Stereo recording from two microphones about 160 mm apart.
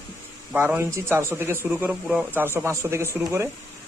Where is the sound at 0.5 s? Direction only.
15° right (ahead or behind).